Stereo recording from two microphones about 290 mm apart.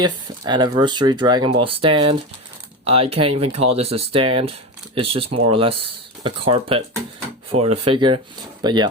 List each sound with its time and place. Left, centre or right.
0.0 s speech: centre